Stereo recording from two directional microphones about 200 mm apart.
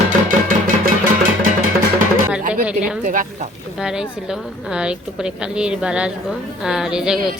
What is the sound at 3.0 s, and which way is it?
Speech, 40° right (ahead or behind).